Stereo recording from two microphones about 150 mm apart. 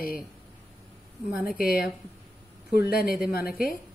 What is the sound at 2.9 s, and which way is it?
Speech, 90° left.